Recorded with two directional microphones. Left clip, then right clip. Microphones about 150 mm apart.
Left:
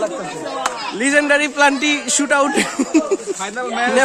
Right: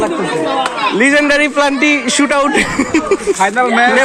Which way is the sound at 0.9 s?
10° left (ahead or behind).